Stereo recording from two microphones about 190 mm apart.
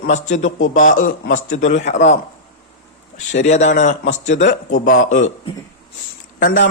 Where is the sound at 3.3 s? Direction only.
40° left (ahead or behind).